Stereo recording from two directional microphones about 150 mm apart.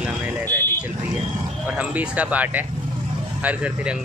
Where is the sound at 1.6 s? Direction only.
10° right (ahead or behind).